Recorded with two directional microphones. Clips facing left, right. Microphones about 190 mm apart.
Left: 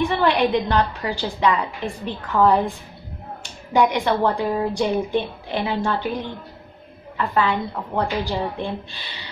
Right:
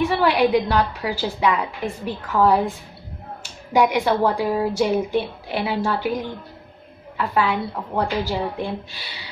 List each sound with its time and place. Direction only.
0.0 s a woman's voice: 5° right (ahead or behind)
3.7 s a woman's voice: 5° right (ahead or behind)